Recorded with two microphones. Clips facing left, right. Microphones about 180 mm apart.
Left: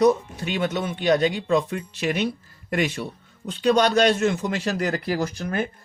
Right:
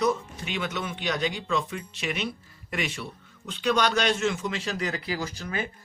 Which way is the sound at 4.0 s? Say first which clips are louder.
Left 6 dB; 55° left (ahead or behind).